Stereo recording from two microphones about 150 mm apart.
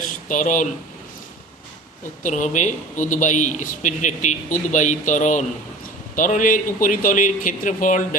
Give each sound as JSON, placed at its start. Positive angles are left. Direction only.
{"t": 0.3, "sound": "speech", "side_deg": 60}
{"t": 2.2, "sound": "speech", "side_deg": 55}